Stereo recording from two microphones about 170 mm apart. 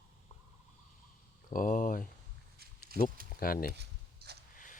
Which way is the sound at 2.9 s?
60° right (ahead or behind).